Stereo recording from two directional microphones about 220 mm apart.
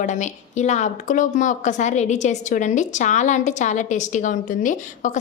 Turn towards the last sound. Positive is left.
turn(degrees=35)  # may be behind; listen again after turning